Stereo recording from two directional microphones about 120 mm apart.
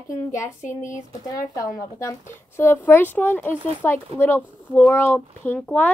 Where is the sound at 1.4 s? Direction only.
25° left (ahead or behind).